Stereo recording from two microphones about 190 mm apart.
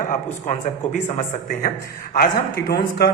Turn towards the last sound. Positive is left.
turn(degrees=55)  # may be behind; listen again after turning